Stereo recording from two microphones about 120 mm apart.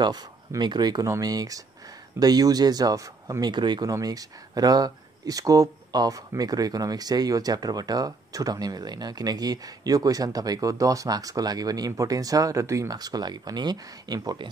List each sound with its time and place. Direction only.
0.0 s speech: 35° right (ahead or behind)